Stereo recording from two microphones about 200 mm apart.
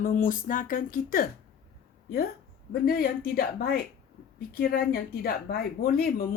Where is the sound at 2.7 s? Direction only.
50° left (ahead or behind).